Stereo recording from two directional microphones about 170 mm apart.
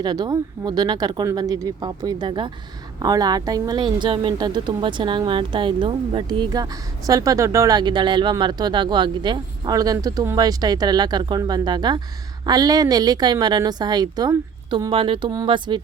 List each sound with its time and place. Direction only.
0.0 s speech: 25° right (ahead or behind)